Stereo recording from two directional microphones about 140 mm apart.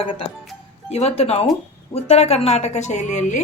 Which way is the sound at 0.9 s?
50° left (ahead or behind).